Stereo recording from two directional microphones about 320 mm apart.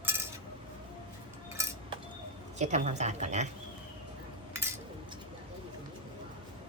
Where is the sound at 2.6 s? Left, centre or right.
Right.